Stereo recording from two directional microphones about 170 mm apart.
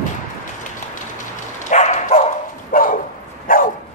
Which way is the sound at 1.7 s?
40° left (ahead or behind).